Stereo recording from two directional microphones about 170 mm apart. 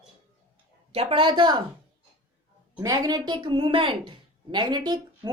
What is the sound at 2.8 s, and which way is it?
A woman's voice, 20° right (ahead or behind).